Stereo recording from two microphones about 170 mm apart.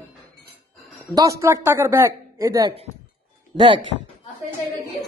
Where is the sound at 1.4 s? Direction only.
15° right (ahead or behind).